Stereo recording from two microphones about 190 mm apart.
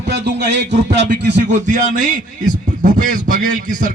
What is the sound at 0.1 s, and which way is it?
A man's voice, 65° right (ahead or behind).